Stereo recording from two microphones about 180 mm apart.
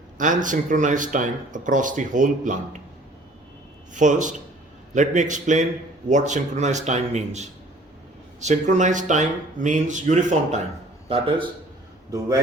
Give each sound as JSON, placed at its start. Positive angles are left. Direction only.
{"t": 0.2, "sound": "speech", "side_deg": -45}
{"t": 3.9, "sound": "a man's voice", "side_deg": -45}